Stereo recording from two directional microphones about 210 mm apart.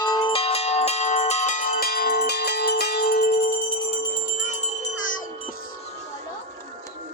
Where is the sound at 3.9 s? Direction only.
35° left (ahead or behind).